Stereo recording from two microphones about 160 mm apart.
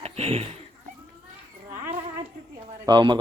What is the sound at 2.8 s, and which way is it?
Speech, 30° right (ahead or behind).